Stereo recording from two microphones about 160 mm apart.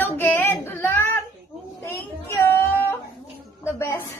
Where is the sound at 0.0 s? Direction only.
15° left (ahead or behind).